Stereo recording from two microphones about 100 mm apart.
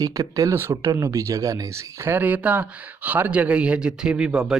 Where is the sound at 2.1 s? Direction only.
15° right (ahead or behind).